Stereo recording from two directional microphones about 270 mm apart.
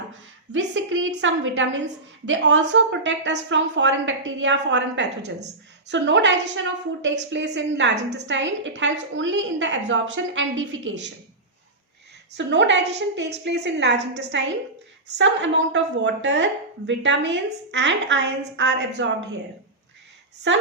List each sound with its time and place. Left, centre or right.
0.5 s a woman's voice: right
12.4 s speech: right
20.5 s a woman's voice: right